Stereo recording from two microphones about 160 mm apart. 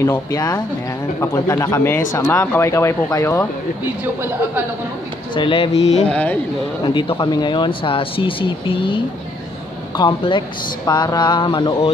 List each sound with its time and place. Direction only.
0.0 s speech: 20° left (ahead or behind)
5.3 s speech: 30° left (ahead or behind)
6.0 s speech: 10° left (ahead or behind)
6.8 s speech: 30° left (ahead or behind)